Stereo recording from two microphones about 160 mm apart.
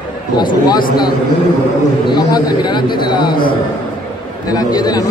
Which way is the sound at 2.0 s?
25° left (ahead or behind).